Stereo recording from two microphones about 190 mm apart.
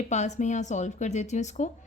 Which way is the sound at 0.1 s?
40° left (ahead or behind).